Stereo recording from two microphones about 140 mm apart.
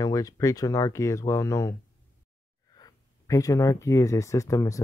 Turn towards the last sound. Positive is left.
turn(degrees=20)  # may be behind; listen again after turning